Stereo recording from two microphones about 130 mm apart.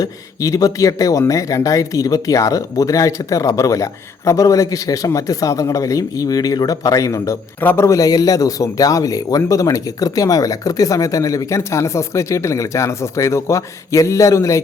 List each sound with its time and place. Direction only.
0.0 s speech: 25° left (ahead or behind)